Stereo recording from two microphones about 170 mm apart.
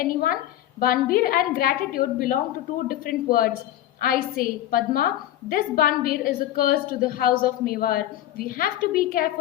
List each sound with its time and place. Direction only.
0.0 s a woman's voice: 55° left (ahead or behind)